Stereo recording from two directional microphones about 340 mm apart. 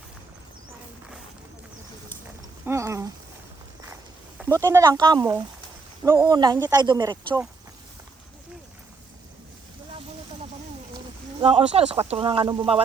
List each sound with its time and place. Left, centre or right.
2.6 s speech: centre
4.4 s speech: centre
11.3 s speech: centre